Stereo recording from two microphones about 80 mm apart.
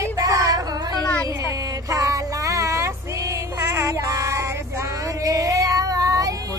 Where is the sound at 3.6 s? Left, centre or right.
Right.